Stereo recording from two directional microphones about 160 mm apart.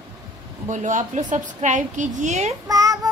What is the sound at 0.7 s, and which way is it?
A woman's voice, 50° right (ahead or behind).